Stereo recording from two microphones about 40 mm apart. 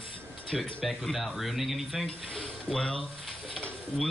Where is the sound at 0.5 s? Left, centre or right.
Centre.